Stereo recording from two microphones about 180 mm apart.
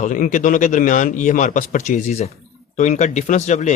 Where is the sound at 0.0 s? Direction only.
45° left (ahead or behind).